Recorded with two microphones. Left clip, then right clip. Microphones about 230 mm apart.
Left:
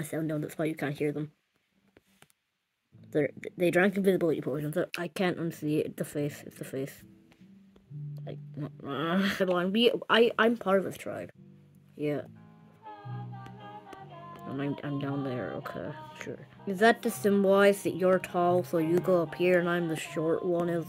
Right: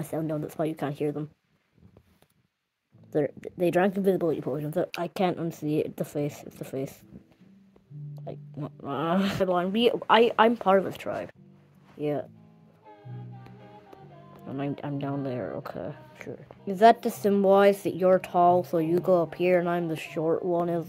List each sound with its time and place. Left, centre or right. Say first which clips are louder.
0.0 s speech: right 2 dB; centre
3.3 s speech: right 1 dB; centre
8.1 s speech: right 4 dB; centre
13.4 s music: left 4 dB; centre
14.4 s speech: right 2 dB; centre